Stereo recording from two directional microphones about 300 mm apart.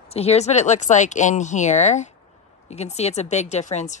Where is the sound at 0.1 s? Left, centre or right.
Left.